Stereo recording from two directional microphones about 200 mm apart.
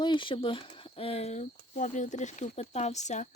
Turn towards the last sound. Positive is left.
turn(degrees=35)  # may be behind; listen again after turning